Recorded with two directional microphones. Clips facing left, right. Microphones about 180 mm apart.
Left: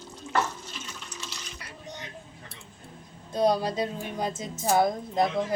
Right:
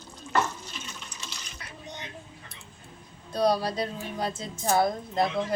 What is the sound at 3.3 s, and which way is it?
Speech, 20° left (ahead or behind).